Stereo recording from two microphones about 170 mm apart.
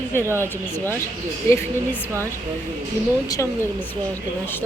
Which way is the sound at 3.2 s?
20° left (ahead or behind).